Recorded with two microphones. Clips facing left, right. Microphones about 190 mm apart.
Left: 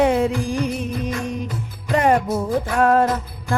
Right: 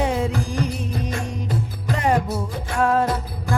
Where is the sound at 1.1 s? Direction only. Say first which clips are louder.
Left 2 dB; 30° right (ahead or behind).